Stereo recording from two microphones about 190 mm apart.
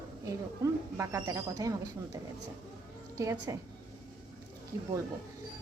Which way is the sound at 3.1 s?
15° right (ahead or behind).